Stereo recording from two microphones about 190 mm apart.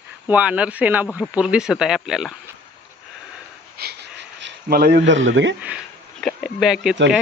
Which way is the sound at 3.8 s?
60° right (ahead or behind).